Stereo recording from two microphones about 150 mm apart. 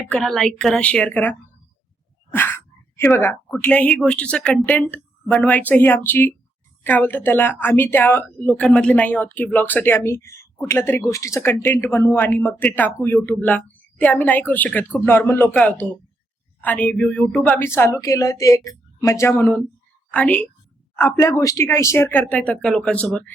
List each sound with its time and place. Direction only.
0.1 s speech: 5° left (ahead or behind)
2.3 s gasp: 15° left (ahead or behind)
3.5 s a woman's voice: 10° left (ahead or behind)